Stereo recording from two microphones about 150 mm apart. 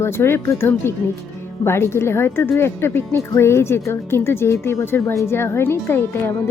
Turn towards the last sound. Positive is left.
turn(degrees=15)  # may be behind; listen again after turning